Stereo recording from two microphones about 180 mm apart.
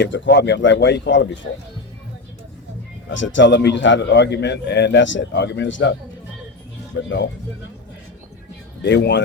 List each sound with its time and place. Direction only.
0.0 s speech: 80° left
3.1 s a man's voice: 90° left
8.8 s a man's voice: 75° left (ahead or behind)